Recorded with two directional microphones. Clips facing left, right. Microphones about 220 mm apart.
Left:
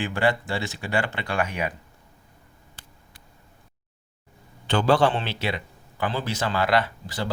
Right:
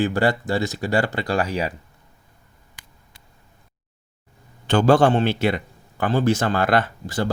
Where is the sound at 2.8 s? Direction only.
15° right (ahead or behind).